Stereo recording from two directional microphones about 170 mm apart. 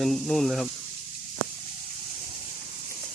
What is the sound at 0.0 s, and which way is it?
Speech, centre (ahead or behind).